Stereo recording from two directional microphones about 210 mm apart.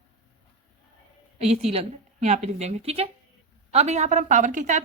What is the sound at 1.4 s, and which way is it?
Speech, 30° right (ahead or behind).